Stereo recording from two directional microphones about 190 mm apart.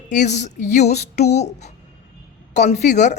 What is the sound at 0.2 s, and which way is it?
Speech, 40° left (ahead or behind).